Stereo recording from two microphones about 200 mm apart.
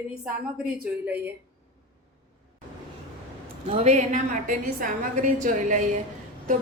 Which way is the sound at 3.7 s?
35° right (ahead or behind).